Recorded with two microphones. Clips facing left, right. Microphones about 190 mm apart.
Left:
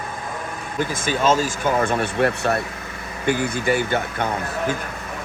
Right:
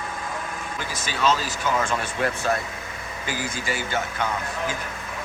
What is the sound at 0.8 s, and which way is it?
Speech, 50° left (ahead or behind).